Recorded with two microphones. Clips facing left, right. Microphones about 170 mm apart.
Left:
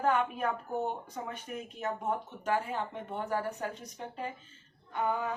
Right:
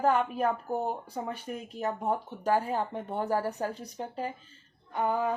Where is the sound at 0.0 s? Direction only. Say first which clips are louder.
Right 3 dB; 35° right (ahead or behind).